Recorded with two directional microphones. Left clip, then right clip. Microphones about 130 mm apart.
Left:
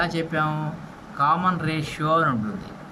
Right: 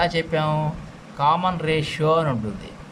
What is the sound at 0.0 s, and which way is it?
Speech, 30° right (ahead or behind).